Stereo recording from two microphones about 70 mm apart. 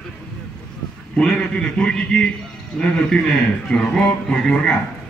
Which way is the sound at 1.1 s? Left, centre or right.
Centre.